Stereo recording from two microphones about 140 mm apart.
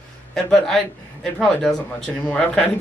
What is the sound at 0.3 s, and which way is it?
A woman's voice, 5° left (ahead or behind).